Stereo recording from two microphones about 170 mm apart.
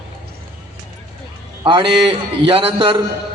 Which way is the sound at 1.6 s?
30° right (ahead or behind).